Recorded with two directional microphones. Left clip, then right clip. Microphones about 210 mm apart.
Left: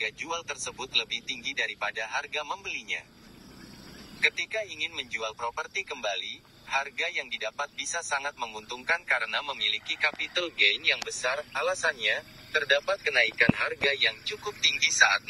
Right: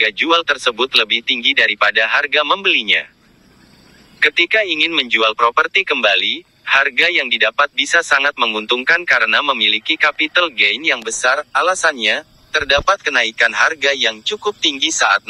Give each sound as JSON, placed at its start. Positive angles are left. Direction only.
{"t": 0.0, "sound": "speech", "side_deg": -35}
{"t": 4.2, "sound": "speech", "side_deg": -35}